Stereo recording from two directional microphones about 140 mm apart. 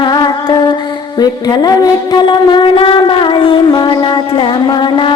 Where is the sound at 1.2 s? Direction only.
30° left (ahead or behind).